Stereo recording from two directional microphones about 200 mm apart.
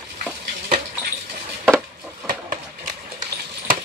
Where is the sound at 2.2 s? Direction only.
40° right (ahead or behind).